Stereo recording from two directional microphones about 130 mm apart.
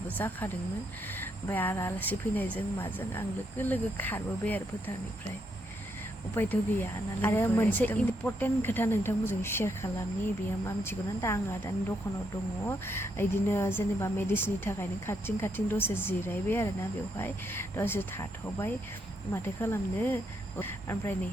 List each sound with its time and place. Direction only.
0.2 s speech: 15° left (ahead or behind)
6.3 s a woman's voice: 15° left (ahead or behind)